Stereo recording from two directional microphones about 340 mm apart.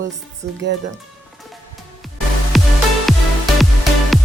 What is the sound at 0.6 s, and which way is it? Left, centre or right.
Speech, right.